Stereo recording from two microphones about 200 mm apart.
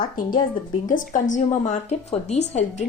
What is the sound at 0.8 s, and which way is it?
A woman's voice, 40° left (ahead or behind).